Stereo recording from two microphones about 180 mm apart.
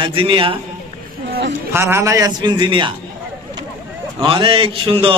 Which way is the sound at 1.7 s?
15° right (ahead or behind).